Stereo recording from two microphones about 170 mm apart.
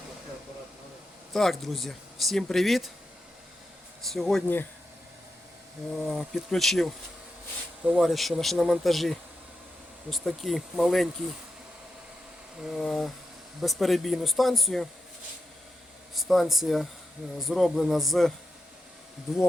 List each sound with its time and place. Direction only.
1.3 s speech: centre (ahead or behind)
4.0 s speech: centre (ahead or behind)
6.0 s speech: centre (ahead or behind)
12.6 s speech: centre (ahead or behind)
16.1 s speech: centre (ahead or behind)